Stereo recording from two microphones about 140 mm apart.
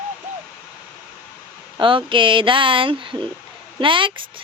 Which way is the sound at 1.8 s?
35° right (ahead or behind).